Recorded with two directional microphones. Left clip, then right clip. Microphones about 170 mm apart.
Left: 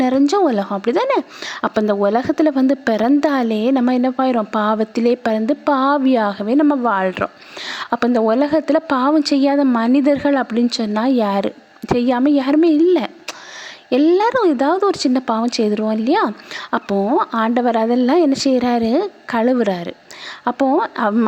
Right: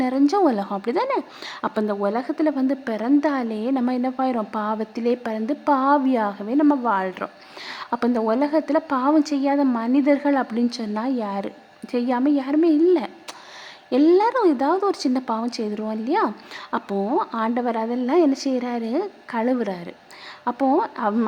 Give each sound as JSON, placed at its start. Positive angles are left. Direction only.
{"t": 0.0, "sound": "a woman's voice", "side_deg": 25}